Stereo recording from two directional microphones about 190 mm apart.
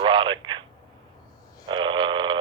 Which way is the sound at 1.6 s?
25° right (ahead or behind).